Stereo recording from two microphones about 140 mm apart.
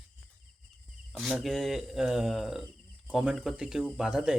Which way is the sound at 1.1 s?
Centre (ahead or behind).